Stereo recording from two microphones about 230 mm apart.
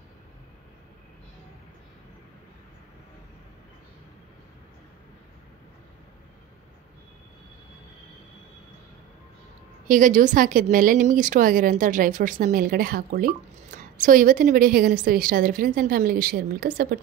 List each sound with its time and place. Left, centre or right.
9.8 s a woman's voice: right